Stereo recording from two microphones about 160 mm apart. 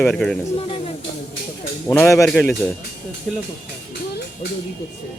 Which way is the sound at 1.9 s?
15° left (ahead or behind).